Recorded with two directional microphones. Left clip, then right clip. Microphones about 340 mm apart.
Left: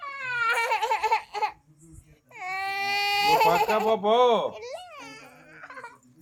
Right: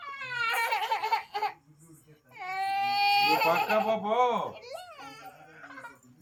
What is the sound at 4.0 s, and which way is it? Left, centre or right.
Speech, left.